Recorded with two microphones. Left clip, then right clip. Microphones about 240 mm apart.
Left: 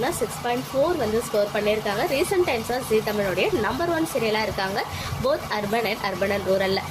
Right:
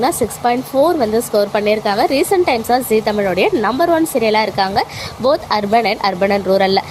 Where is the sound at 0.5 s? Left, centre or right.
Right.